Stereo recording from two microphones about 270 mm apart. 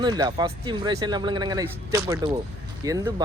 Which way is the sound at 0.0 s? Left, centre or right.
Centre.